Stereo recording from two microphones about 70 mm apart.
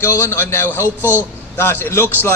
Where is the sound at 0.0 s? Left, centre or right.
Left.